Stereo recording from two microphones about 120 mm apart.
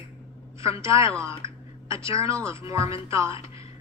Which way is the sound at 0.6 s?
25° right (ahead or behind).